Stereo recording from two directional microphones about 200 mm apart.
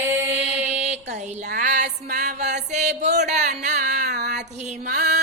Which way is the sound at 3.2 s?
35° right (ahead or behind).